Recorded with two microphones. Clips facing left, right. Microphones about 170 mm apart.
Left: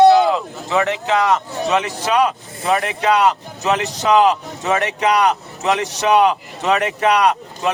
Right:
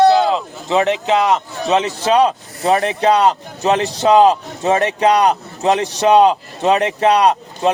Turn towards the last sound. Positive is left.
turn(degrees=-30)  # may be behind; listen again after turning